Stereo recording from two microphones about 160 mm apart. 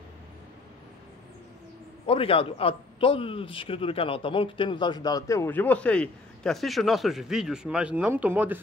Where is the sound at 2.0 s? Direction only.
35° left (ahead or behind).